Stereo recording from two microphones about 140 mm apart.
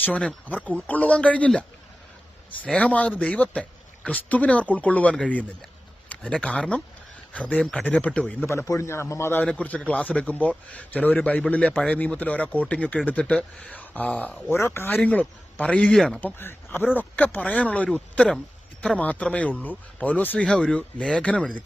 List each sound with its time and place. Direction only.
0.0 s a man's voice: 10° left (ahead or behind)
2.6 s a man's voice: 10° left (ahead or behind)
16.2 s a man's voice: 15° left (ahead or behind)